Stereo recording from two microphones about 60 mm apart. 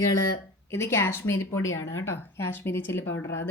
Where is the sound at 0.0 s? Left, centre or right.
Left.